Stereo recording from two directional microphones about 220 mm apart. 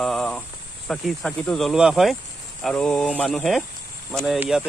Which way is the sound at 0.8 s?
5° left (ahead or behind).